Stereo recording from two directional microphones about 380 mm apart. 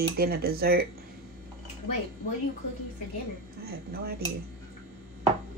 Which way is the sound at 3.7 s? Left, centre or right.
Right.